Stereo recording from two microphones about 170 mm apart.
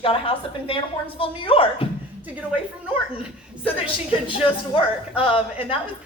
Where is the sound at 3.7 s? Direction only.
30° left (ahead or behind).